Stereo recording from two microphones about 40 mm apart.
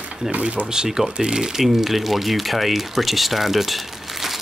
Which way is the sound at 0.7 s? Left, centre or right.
Centre.